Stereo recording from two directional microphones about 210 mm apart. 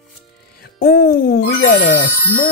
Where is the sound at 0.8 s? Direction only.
45° left (ahead or behind).